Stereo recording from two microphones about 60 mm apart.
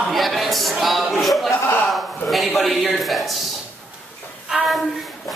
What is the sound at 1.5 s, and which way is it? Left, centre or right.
Speech, left.